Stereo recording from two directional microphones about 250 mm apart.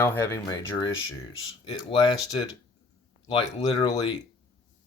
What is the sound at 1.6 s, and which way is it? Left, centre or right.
Speech, centre.